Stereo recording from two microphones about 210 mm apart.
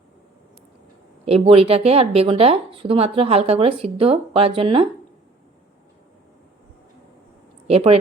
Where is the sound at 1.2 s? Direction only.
30° right (ahead or behind).